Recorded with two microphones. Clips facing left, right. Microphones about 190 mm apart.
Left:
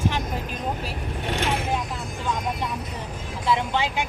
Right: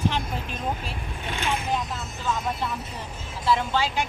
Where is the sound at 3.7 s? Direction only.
20° left (ahead or behind).